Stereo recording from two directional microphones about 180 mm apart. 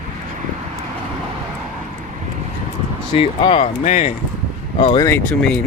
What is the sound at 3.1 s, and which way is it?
Speech, 30° left (ahead or behind).